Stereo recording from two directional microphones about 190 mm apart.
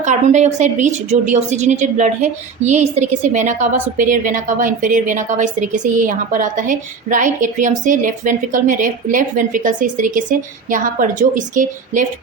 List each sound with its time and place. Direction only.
0.0 s a woman's voice: 40° right (ahead or behind)